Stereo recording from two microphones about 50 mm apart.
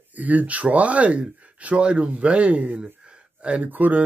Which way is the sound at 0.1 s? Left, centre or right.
Right.